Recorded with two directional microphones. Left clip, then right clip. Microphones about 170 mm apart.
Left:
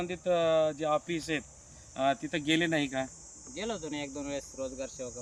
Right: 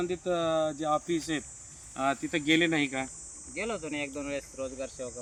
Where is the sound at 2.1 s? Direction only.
40° left (ahead or behind).